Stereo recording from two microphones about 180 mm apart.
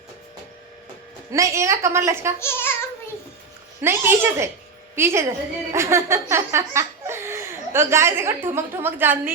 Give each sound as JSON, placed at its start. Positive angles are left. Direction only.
{"t": 1.3, "sound": "a woman's voice", "side_deg": -15}
{"t": 2.4, "sound": "speech", "side_deg": 15}
{"t": 3.8, "sound": "a woman's voice", "side_deg": -15}
{"t": 5.7, "sound": "laughter", "side_deg": -15}
{"t": 8.4, "sound": "a woman's voice", "side_deg": -10}